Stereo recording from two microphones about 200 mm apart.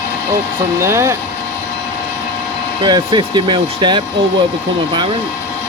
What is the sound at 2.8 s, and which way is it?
Speech, 20° right (ahead or behind).